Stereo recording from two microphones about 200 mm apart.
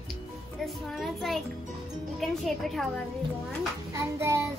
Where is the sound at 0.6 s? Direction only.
Centre (ahead or behind).